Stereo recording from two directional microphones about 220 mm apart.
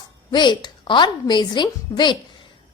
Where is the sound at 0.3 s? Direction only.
20° left (ahead or behind).